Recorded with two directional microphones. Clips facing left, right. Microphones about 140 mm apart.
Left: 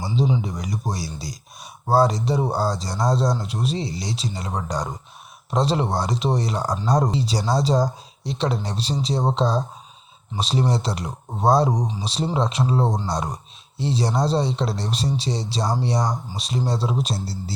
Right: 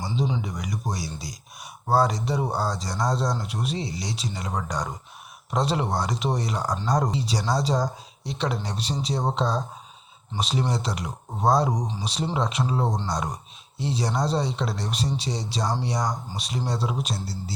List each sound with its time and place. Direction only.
0.4 s speech: 30° left (ahead or behind)